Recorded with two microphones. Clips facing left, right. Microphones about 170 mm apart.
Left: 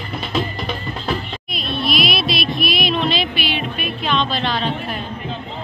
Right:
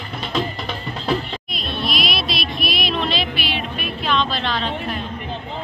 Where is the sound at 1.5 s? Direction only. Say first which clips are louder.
Left 5 dB; centre (ahead or behind).